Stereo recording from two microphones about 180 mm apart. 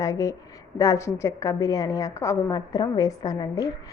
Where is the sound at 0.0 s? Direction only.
15° left (ahead or behind).